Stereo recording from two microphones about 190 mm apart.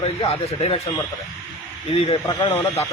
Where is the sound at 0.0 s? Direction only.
25° left (ahead or behind).